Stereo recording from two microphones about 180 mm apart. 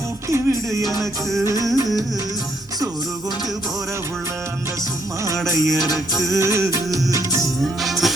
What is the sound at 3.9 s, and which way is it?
Music, 15° right (ahead or behind).